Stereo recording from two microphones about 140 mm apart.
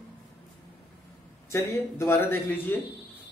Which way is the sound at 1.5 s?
20° left (ahead or behind).